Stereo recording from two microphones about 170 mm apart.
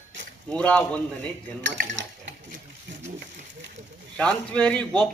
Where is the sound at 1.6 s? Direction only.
90° right.